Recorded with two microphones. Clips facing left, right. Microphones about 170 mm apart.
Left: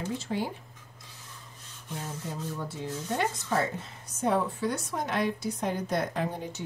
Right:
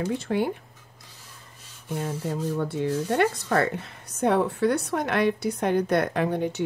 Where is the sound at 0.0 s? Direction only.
60° right (ahead or behind).